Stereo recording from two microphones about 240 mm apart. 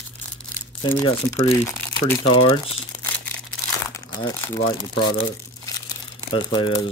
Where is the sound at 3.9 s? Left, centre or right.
Centre.